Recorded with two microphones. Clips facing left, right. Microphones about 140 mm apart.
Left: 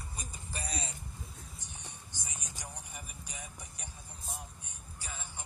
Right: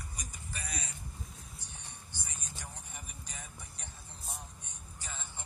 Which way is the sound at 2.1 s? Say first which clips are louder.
Right 1 dB; 15° left (ahead or behind).